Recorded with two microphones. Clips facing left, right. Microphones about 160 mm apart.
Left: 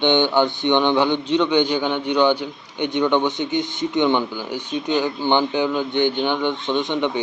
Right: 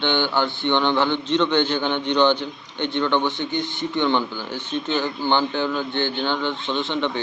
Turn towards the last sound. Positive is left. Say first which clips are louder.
# left 3 dB
turn(degrees=15)  # may be behind; listen again after turning